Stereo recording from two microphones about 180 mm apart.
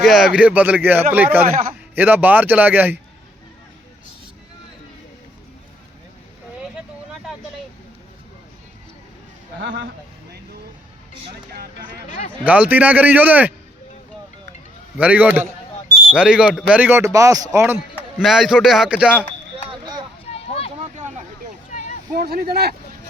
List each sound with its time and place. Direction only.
0.0 s a man's voice: centre (ahead or behind)
12.5 s a man's voice: 10° right (ahead or behind)
14.9 s a man's voice: 10° right (ahead or behind)
18.2 s speech: centre (ahead or behind)
21.7 s a sound: 45° left (ahead or behind)
22.2 s speech: 60° right (ahead or behind)